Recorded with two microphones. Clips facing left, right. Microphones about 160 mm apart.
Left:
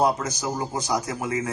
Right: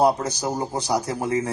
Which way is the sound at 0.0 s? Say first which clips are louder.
Right 3 dB; 30° right (ahead or behind).